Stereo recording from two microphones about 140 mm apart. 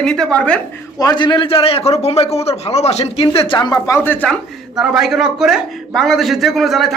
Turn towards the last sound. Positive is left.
turn(degrees=0)  # may be behind; listen again after turning